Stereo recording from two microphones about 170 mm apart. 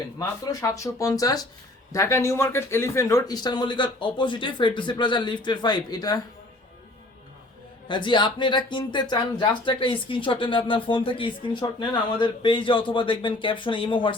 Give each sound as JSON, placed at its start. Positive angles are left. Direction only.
{"t": 0.2, "sound": "speech", "side_deg": 20}
{"t": 7.9, "sound": "speech", "side_deg": 30}